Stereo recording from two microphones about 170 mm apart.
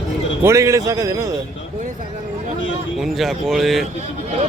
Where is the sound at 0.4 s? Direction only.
15° right (ahead or behind).